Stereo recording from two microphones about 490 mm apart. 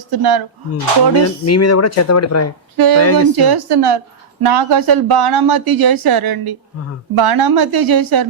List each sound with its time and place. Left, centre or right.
0.1 s a woman's voice: right
1.1 s speech: left
2.7 s a woman's voice: right
3.0 s speech: left
3.3 s a woman's voice: right